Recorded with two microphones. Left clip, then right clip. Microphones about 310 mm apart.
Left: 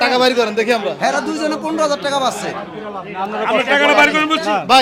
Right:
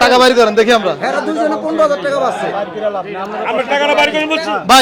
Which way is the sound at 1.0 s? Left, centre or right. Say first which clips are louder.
Right 2 dB; left.